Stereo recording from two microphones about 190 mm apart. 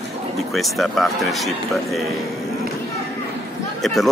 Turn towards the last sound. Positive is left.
turn(degrees=0)  # may be behind; listen again after turning